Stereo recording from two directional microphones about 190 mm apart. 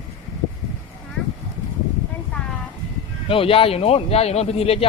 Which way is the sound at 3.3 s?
30° left (ahead or behind).